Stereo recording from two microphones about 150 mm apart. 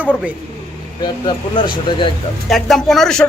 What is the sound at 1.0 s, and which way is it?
Speech, 30° left (ahead or behind).